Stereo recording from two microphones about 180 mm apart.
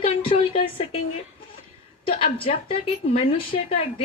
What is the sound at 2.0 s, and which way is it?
Speech, 30° left (ahead or behind).